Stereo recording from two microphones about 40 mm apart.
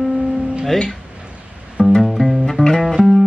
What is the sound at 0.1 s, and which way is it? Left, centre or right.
Guitar, right.